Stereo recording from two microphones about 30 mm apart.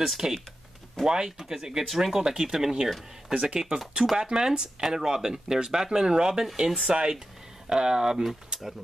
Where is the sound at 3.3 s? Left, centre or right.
Right.